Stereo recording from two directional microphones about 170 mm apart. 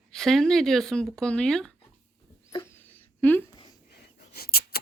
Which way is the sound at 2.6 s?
10° left (ahead or behind).